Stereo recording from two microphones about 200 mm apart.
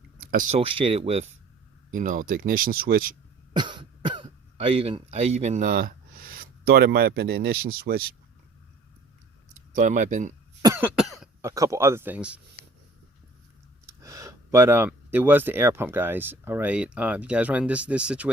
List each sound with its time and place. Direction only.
0.3 s speech: 40° right (ahead or behind)
3.5 s speech: 20° right (ahead or behind); by 8.0 s 50° right (ahead or behind)
9.7 s speech: 40° right (ahead or behind)
10.6 s cough: 15° right (ahead or behind)
11.4 s speech: 15° right (ahead or behind)
13.8 s speech: 15° right (ahead or behind)